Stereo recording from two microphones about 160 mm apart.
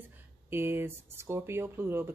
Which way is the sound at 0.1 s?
15° right (ahead or behind).